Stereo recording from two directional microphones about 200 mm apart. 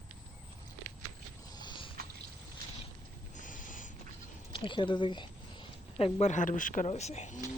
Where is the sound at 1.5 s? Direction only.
20° left (ahead or behind).